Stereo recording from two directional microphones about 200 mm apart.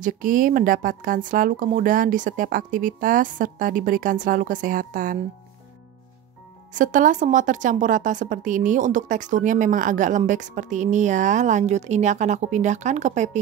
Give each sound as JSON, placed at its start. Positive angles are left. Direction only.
{"t": 0.0, "sound": "speech", "side_deg": -45}
{"t": 6.7, "sound": "speech", "side_deg": -40}